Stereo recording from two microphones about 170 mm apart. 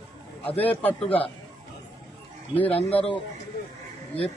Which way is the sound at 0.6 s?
10° left (ahead or behind).